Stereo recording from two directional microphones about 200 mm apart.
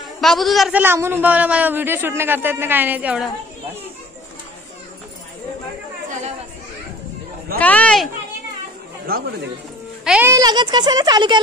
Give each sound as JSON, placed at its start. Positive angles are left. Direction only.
{"t": 0.2, "sound": "a man's voice", "side_deg": 0}
{"t": 7.5, "sound": "speech", "side_deg": 5}
{"t": 9.0, "sound": "speech", "side_deg": -50}
{"t": 10.0, "sound": "speech", "side_deg": -10}